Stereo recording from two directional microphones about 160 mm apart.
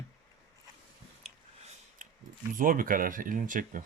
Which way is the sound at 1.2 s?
40° right (ahead or behind).